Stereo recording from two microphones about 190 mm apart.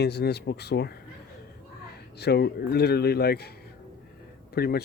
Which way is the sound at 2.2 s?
60° left (ahead or behind).